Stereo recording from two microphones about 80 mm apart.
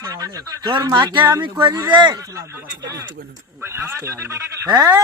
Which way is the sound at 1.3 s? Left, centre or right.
Right.